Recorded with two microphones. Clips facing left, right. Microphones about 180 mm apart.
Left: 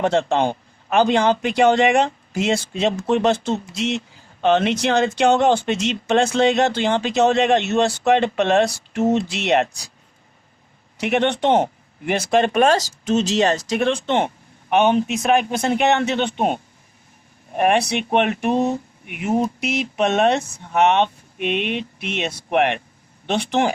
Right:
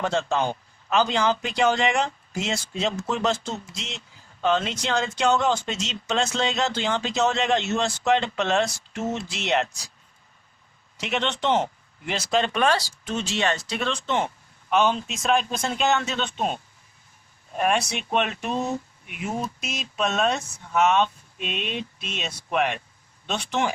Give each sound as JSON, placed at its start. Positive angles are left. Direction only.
{"t": 0.0, "sound": "speech", "side_deg": 60}
{"t": 10.9, "sound": "speech", "side_deg": 60}